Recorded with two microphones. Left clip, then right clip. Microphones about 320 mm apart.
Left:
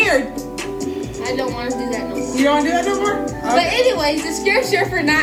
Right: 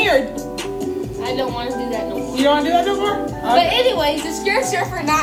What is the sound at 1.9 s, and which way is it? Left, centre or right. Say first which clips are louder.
A woman's voice: even; centre.